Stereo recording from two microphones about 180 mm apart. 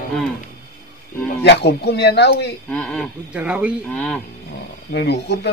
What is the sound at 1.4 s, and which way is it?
Speech, 70° left (ahead or behind).